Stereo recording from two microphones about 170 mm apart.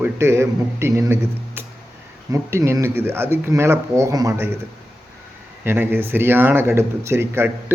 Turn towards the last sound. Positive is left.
turn(degrees=-15)  # may be behind; listen again after turning